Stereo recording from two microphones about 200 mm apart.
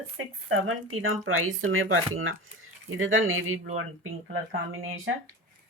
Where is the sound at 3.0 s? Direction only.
80° right.